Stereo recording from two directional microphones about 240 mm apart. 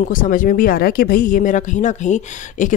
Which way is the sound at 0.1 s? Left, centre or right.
Left.